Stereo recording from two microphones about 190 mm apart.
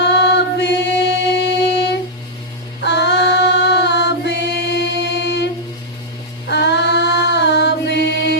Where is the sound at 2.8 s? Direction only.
65° left (ahead or behind).